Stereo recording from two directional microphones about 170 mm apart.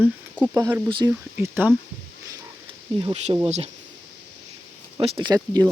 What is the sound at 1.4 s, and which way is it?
Speech, 10° right (ahead or behind).